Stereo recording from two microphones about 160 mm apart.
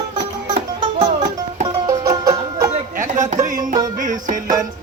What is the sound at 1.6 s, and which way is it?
Music, 25° right (ahead or behind).